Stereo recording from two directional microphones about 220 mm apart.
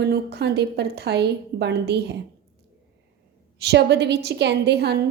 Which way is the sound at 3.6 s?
50° right (ahead or behind).